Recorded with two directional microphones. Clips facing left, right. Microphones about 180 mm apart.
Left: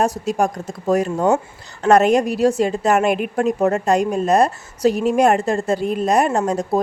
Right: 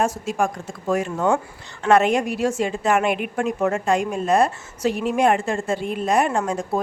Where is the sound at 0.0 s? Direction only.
40° left (ahead or behind).